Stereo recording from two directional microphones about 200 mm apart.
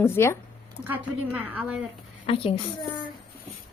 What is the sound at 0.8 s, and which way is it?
Speech, 10° right (ahead or behind).